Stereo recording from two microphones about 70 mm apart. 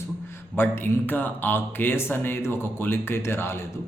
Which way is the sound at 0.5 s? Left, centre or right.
Left.